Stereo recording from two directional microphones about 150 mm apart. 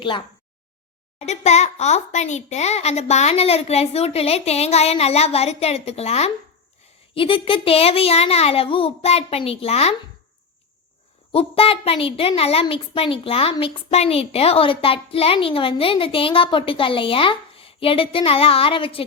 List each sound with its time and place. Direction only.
1.2 s a child's voice: 45° left (ahead or behind)
11.3 s a woman's voice: 40° left (ahead or behind)